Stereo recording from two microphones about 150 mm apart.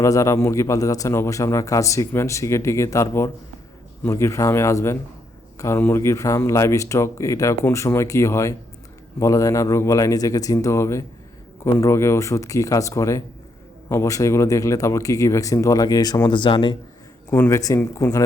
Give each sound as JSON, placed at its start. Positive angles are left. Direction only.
{"t": 0.0, "sound": "speech", "side_deg": 20}
{"t": 17.3, "sound": "speech", "side_deg": 15}